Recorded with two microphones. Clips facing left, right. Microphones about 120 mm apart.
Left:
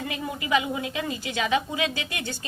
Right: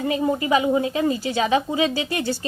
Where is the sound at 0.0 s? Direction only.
35° right (ahead or behind).